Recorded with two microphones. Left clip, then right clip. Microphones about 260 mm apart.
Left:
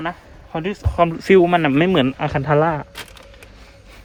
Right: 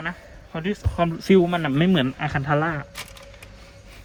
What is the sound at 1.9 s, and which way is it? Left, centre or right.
Speech, centre.